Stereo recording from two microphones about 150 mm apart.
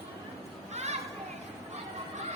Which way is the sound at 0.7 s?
45° right (ahead or behind).